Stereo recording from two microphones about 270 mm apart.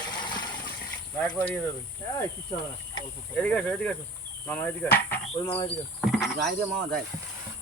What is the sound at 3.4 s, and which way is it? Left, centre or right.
Speech, centre.